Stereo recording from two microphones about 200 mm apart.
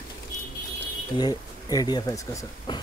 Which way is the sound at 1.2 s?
20° left (ahead or behind).